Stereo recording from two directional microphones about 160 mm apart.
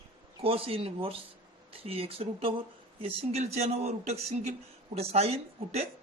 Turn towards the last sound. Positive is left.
turn(degrees=-40)  # may be behind; listen again after turning